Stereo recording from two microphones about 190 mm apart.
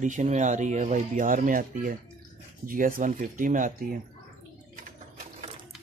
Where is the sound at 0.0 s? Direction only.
40° right (ahead or behind).